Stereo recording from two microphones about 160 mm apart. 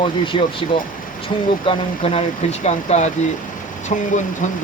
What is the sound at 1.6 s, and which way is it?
Speech, 35° left (ahead or behind).